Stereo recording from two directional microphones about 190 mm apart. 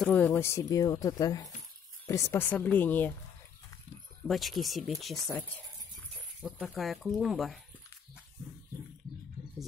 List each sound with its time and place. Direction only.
0.0 s speech: 10° left (ahead or behind)
4.3 s speech: centre (ahead or behind)
6.4 s speech: centre (ahead or behind)